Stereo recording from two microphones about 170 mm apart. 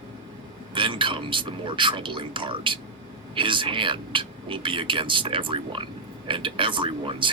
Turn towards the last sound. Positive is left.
turn(degrees=-30)  # may be behind; listen again after turning